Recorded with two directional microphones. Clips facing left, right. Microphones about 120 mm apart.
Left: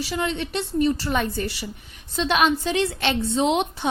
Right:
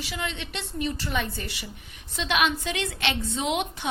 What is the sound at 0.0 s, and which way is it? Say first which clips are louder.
A woman's voice: left 7 dB; 40° left (ahead or behind).